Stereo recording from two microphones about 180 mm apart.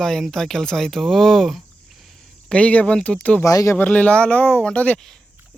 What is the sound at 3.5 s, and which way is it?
Speech, 15° left (ahead or behind).